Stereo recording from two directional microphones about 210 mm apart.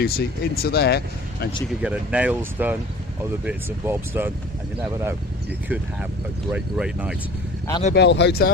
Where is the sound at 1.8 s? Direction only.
5° right (ahead or behind).